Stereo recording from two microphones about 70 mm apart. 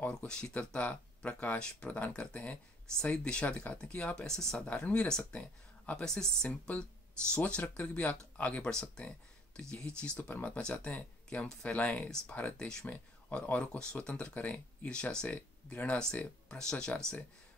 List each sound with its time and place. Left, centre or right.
0.2 s speech: centre
4.6 s speech: centre